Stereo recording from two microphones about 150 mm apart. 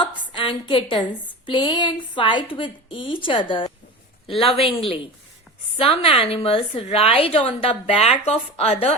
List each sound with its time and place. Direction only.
0.3 s a woman's voice: 35° left (ahead or behind)